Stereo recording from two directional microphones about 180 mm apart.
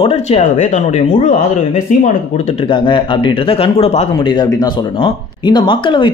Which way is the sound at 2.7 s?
25° left (ahead or behind).